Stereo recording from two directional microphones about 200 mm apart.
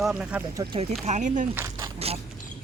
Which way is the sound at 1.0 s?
35° right (ahead or behind).